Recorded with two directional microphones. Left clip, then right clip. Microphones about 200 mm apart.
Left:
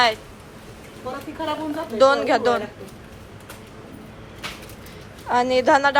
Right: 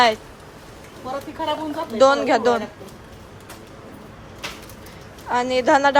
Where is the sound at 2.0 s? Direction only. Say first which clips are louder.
Right 1 dB; 20° right (ahead or behind).